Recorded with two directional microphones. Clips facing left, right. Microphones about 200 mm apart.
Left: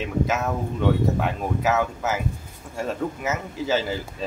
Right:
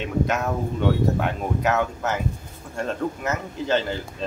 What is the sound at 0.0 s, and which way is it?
Speech, centre (ahead or behind).